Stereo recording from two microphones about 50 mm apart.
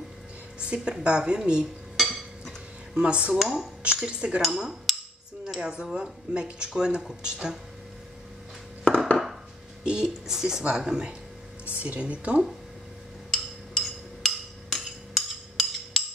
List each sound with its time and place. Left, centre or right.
0.7 s speech: right
2.0 s a sound: centre
2.9 s speech: right
3.3 s speech: centre
3.8 s speech: right
4.4 s speech: centre
8.8 s a sound: left
9.8 s a woman's voice: centre
11.6 s speech: right
13.8 s wood block: centre